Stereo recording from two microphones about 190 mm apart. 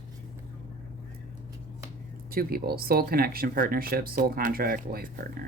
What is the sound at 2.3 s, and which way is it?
Speech, 50° right (ahead or behind).